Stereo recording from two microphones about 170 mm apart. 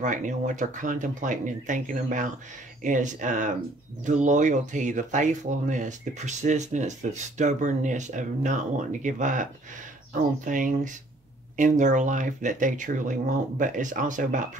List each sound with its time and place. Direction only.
0.0 s speech: 50° right (ahead or behind)